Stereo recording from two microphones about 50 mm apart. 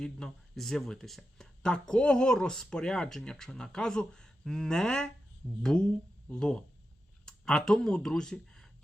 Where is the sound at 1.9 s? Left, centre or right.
Centre.